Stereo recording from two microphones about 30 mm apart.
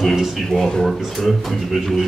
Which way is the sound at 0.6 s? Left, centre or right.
Left.